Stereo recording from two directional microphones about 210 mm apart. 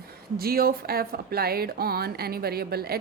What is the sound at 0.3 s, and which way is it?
Speech, 45° right (ahead or behind).